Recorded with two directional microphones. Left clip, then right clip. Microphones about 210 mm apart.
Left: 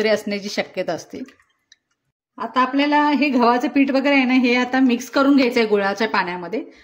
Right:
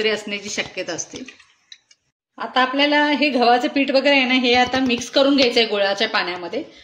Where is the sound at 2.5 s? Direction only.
55° left (ahead or behind).